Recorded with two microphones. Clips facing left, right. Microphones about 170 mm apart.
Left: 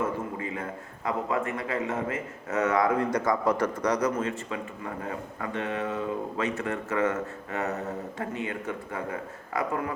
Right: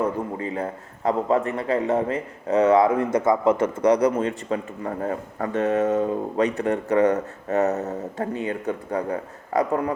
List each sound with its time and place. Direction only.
0.0 s a man's voice: 35° right (ahead or behind)